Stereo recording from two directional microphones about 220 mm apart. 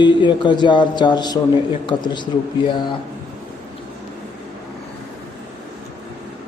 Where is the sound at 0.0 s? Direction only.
20° left (ahead or behind).